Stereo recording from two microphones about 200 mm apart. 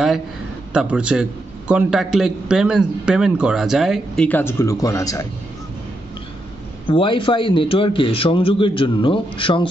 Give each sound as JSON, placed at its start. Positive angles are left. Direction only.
{"t": 0.7, "sound": "a man's voice", "side_deg": -5}
{"t": 6.9, "sound": "a man's voice", "side_deg": 25}